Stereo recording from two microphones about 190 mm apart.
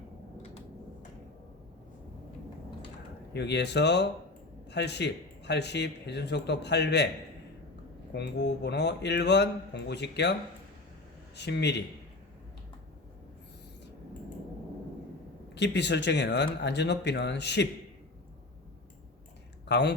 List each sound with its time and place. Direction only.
3.3 s speech: 60° left (ahead or behind)
8.1 s speech: 65° left (ahead or behind)
11.3 s speech: 65° left (ahead or behind)
15.5 s speech: 65° left (ahead or behind)
19.6 s speech: 65° left (ahead or behind)